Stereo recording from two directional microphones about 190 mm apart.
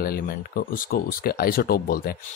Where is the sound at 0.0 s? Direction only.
50° left (ahead or behind).